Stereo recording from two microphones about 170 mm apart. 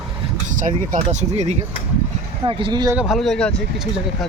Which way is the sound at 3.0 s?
Centre (ahead or behind).